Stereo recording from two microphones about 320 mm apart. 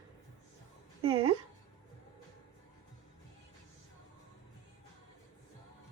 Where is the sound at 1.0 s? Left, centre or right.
Centre.